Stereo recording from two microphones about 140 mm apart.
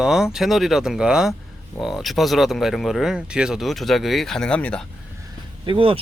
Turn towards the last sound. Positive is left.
turn(degrees=-40)  # may be behind; listen again after turning